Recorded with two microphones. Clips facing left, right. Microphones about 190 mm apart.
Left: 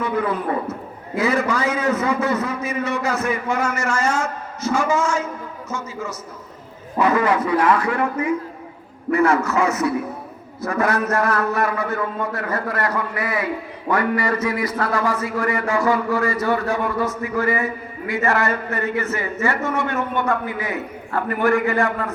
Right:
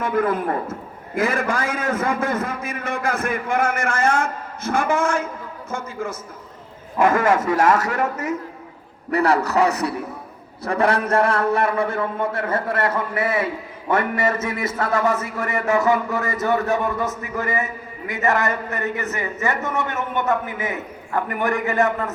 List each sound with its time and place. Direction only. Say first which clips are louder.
0.0 s a man's voice: right 1 dB; 50° right (ahead or behind); by 22.1 s 20° right (ahead or behind)